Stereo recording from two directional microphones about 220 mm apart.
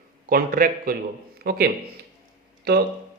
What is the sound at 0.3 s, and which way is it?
A man's voice, 40° right (ahead or behind).